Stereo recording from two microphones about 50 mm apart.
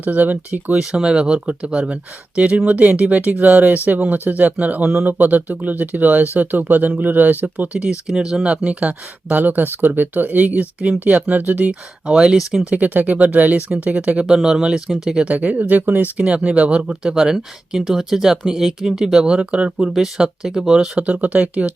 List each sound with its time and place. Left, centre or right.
0.0 s speech: right
0.7 s speech: centre
8.6 s speech: right
12.0 s speech: centre
12.4 s speech: centre
12.7 s speech: right
14.3 s speech: centre
15.3 s speech: right
16.1 s speech: right
16.9 s speech: centre
19.9 s speech: centre
21.1 s speech: right